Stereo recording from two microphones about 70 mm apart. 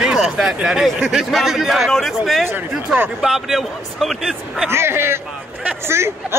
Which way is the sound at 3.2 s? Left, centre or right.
Centre.